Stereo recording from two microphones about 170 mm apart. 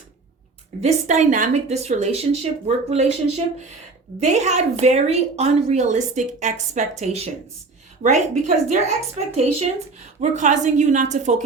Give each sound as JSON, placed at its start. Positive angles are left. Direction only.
{"t": 0.8, "sound": "a woman's voice", "side_deg": -40}
{"t": 8.6, "sound": "a woman's voice", "side_deg": -45}